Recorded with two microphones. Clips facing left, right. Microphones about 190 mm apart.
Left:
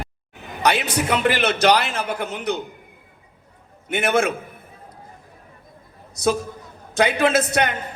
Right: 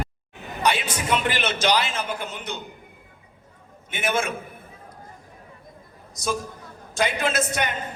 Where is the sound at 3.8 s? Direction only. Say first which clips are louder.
Left 6 dB; 65° left (ahead or behind).